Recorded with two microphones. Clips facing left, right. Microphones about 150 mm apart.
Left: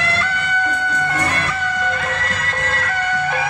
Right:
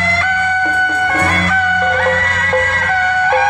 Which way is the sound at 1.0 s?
65° right (ahead or behind).